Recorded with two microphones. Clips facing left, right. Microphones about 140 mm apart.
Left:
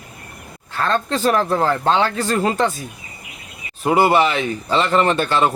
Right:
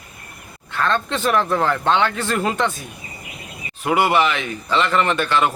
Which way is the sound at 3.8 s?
35° left (ahead or behind).